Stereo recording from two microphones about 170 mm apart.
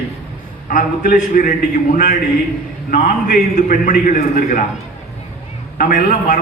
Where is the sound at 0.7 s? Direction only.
50° left (ahead or behind).